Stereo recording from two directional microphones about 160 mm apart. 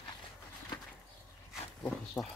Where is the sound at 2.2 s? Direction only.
10° left (ahead or behind).